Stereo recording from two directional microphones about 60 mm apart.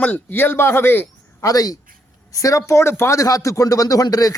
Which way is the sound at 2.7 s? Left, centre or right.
Left.